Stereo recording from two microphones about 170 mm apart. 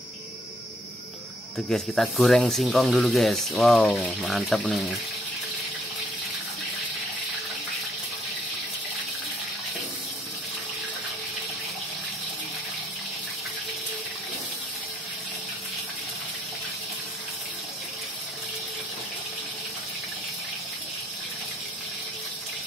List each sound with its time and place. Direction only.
1.7 s speech: centre (ahead or behind)